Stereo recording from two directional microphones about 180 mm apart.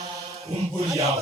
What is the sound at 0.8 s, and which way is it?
Chant, 15° right (ahead or behind).